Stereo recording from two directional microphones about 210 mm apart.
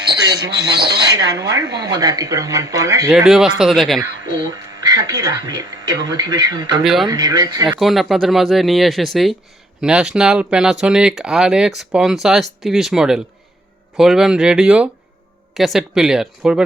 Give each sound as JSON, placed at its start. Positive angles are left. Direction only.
{"t": 0.8, "sound": "speech", "side_deg": -20}
{"t": 3.1, "sound": "speech", "side_deg": 0}
{"t": 4.3, "sound": "speech", "side_deg": -20}
{"t": 6.8, "sound": "speech", "side_deg": 0}
{"t": 7.1, "sound": "speech", "side_deg": -20}
{"t": 7.7, "sound": "speech", "side_deg": 0}